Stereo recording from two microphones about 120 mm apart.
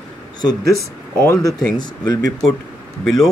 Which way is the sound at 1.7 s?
35° left (ahead or behind).